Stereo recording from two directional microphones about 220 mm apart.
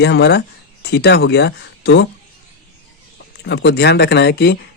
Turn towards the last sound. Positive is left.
turn(degrees=50)  # may be behind; listen again after turning